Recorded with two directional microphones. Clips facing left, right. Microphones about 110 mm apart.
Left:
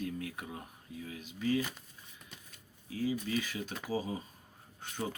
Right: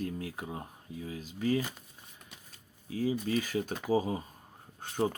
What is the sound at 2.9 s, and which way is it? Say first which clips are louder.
Speech: right 3 dB; 35° right (ahead or behind).